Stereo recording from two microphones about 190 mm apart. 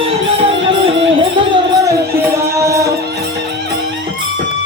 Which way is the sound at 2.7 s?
15° right (ahead or behind).